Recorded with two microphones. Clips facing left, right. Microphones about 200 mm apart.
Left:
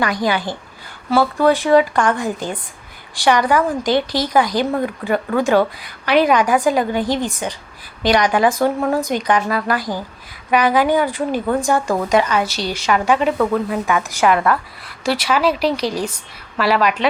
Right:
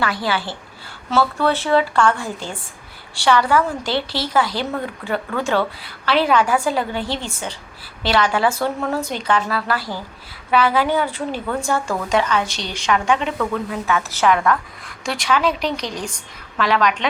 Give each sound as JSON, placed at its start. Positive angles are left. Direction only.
{"t": 0.0, "sound": "a woman's voice", "side_deg": 15}